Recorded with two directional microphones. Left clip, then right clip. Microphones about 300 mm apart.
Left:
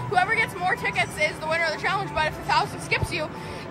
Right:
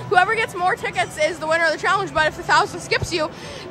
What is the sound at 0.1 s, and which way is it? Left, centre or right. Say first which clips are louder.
Speech: right 5 dB; right.